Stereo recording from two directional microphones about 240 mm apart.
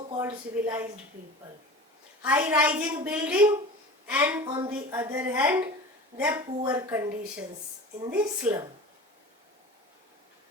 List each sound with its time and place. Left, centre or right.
0.2 s a woman's voice: centre
2.2 s a woman's voice: centre
4.4 s a woman's voice: centre